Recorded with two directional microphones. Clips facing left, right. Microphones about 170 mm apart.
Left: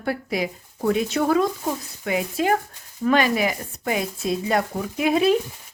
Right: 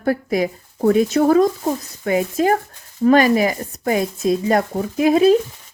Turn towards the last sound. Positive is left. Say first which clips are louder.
# right 6 dB
turn(degrees=-40)  # may be behind; listen again after turning